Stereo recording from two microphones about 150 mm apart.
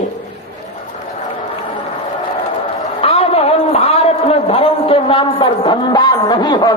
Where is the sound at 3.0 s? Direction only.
40° left (ahead or behind).